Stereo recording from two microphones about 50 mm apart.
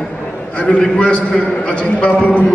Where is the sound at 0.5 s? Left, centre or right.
Left.